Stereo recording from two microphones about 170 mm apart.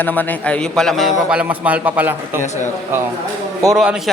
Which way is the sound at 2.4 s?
45° left (ahead or behind).